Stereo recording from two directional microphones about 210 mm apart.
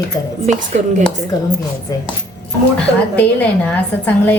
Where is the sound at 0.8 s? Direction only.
30° right (ahead or behind).